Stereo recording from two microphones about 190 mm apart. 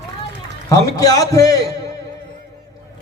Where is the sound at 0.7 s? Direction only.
20° left (ahead or behind).